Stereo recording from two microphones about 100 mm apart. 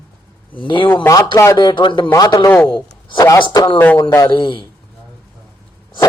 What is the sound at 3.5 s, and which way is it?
Speech, 55° left (ahead or behind).